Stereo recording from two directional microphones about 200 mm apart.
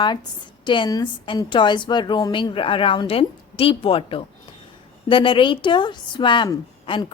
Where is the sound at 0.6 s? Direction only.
25° left (ahead or behind).